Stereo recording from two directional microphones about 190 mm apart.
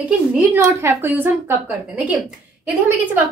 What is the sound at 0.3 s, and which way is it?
A woman's voice, 10° right (ahead or behind).